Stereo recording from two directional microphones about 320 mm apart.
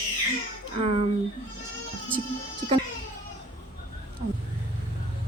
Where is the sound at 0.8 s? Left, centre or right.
Centre.